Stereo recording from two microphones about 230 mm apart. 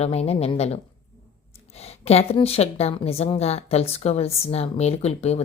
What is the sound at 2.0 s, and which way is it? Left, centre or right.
A woman's voice, left.